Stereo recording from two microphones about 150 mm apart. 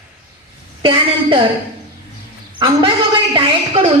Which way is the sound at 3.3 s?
35° right (ahead or behind).